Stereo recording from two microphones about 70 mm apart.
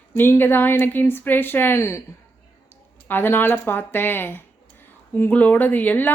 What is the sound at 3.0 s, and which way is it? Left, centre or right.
Speech, left.